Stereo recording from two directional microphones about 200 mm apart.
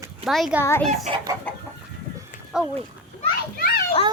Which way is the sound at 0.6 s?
10° left (ahead or behind).